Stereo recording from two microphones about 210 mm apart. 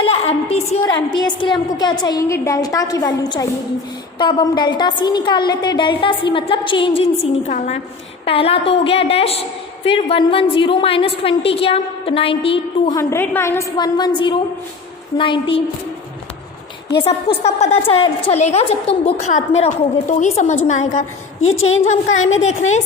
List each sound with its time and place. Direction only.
0.0 s a sound: 25° left (ahead or behind)
1.1 s a woman's voice: 20° left (ahead or behind)
13.0 s a woman's voice: 10° left (ahead or behind)
17.0 s a woman's voice: 30° left (ahead or behind)
21.4 s a woman's voice: 75° left (ahead or behind)
22.3 s a woman's voice: 35° left (ahead or behind)